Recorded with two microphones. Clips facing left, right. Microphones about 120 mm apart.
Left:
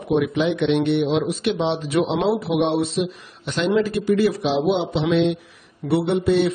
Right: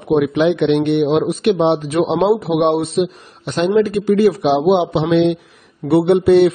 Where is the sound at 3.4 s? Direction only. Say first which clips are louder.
Right 5 dB; 45° right (ahead or behind).